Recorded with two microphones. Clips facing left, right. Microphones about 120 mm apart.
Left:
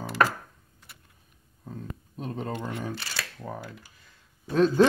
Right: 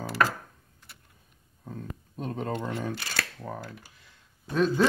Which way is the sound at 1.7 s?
5° left (ahead or behind).